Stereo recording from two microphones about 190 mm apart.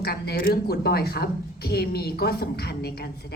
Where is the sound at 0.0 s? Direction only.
55° left (ahead or behind).